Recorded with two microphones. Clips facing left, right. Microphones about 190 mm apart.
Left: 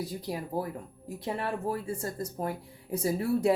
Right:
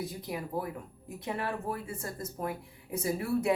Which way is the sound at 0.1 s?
35° left (ahead or behind).